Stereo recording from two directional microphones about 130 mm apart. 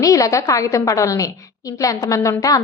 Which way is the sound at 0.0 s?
25° left (ahead or behind).